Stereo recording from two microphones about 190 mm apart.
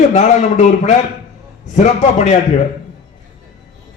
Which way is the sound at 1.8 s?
35° left (ahead or behind).